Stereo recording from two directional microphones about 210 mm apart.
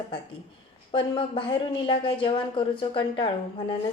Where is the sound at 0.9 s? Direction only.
25° left (ahead or behind).